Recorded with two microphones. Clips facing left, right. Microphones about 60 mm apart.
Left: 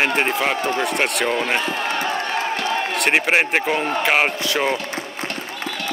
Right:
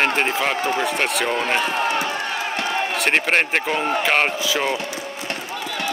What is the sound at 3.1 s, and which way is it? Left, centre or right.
Speech, centre.